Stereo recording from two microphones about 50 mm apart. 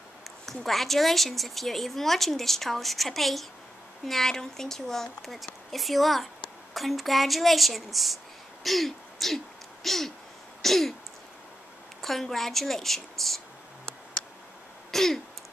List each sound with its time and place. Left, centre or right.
0.5 s speech: centre
10.6 s throat clearing: centre
12.0 s speech: centre
14.2 s tick: centre
14.9 s throat clearing: centre